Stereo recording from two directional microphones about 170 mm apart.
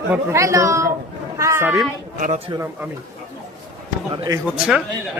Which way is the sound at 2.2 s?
50° right (ahead or behind).